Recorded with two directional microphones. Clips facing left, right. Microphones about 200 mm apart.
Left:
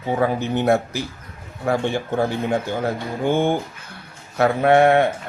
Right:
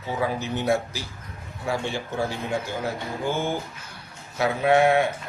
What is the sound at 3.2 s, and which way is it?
Speech, 55° left (ahead or behind).